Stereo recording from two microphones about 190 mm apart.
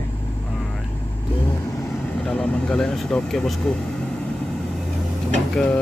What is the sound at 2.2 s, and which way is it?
Speech, 5° left (ahead or behind).